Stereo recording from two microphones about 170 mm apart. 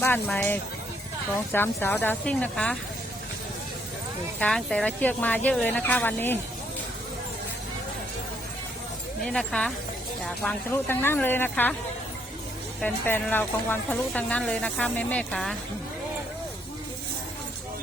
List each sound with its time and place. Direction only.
0.0 s speech: 10° left (ahead or behind)
4.4 s speech: 5° left (ahead or behind)
9.2 s speech: 5° left (ahead or behind)
12.8 s speech: 10° left (ahead or behind)